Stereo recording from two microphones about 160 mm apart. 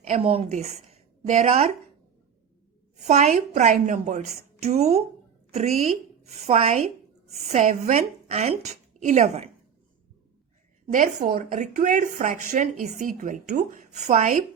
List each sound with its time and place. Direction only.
0.1 s a woman's voice: 40° right (ahead or behind)
3.1 s speech: 50° right (ahead or behind)
10.9 s speech: 55° right (ahead or behind)